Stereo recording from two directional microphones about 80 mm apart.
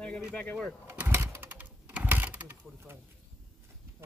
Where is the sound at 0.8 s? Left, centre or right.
Right.